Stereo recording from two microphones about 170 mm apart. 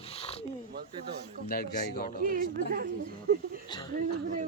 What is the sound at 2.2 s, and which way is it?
Speech, 55° right (ahead or behind).